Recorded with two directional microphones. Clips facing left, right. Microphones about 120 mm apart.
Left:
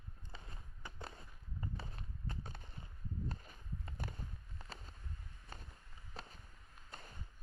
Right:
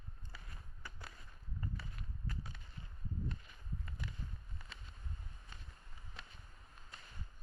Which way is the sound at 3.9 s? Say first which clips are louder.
Left 3 dB; 45° left (ahead or behind).